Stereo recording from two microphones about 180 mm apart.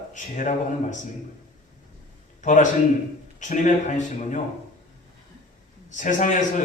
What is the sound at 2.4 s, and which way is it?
A man's voice, 45° left (ahead or behind).